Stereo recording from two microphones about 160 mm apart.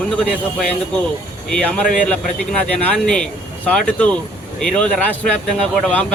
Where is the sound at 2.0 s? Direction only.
5° left (ahead or behind).